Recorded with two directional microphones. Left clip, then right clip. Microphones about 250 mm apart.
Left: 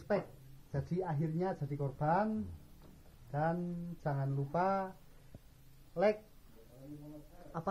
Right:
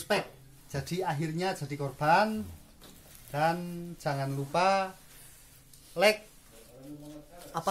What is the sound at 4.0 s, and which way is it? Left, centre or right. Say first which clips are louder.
Speech: right 7 dB; centre.